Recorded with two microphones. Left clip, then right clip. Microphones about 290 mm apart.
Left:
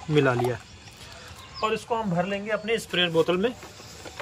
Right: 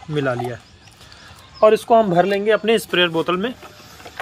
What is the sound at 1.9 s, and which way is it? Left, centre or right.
Speech, right.